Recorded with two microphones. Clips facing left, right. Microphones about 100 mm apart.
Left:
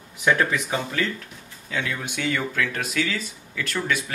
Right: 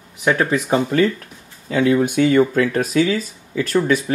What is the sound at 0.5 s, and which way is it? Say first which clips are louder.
Speech: right 9 dB; 45° right (ahead or behind).